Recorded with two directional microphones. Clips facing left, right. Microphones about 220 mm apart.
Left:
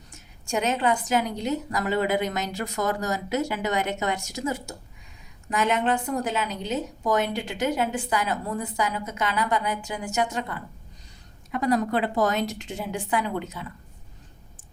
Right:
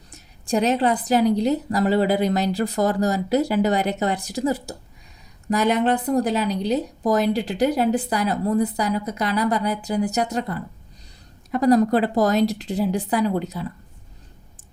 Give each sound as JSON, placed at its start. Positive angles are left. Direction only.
{"t": 0.1, "sound": "speech", "side_deg": -35}